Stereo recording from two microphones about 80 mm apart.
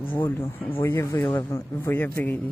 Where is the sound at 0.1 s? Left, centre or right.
Left.